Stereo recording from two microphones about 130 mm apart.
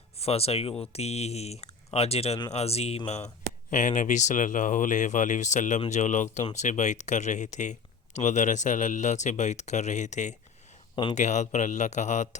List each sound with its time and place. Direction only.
0.2 s speech: 50° left (ahead or behind)
3.7 s speech: 80° left